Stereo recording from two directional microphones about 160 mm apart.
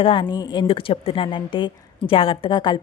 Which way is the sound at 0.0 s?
30° left (ahead or behind).